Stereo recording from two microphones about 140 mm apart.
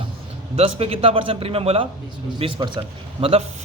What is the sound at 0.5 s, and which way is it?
A man's voice, 45° right (ahead or behind).